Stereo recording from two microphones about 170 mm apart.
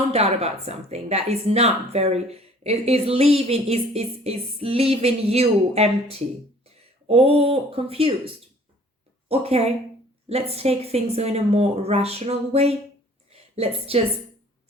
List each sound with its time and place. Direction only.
0.1 s a woman's voice: 40° right (ahead or behind)
9.3 s a woman's voice: 35° right (ahead or behind)